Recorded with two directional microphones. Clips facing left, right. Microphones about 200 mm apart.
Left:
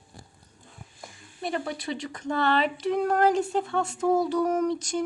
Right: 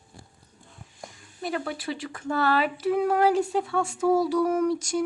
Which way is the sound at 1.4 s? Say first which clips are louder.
Even; centre (ahead or behind).